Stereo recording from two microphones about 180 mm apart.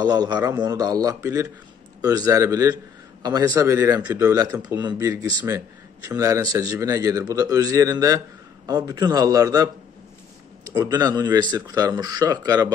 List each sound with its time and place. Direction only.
0.0 s a man's voice: 20° right (ahead or behind)